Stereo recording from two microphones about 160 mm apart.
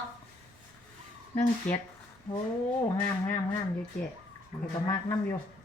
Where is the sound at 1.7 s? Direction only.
10° left (ahead or behind).